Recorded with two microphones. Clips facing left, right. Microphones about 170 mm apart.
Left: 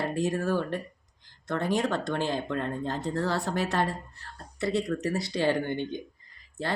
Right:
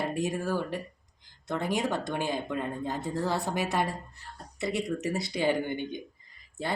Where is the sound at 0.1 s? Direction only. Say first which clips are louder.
Left 2 dB; 15° right (ahead or behind).